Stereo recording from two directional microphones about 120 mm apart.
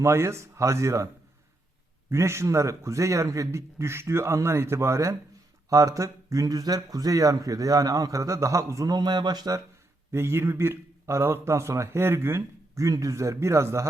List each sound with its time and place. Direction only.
0.0 s speech: 20° right (ahead or behind)
10.1 s speech: 20° right (ahead or behind)